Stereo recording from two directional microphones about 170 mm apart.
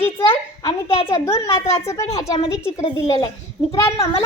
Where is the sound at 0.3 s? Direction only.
35° left (ahead or behind).